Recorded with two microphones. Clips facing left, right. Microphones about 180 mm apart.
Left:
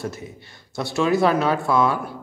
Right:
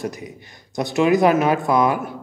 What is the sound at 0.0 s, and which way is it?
A man's voice, 15° right (ahead or behind).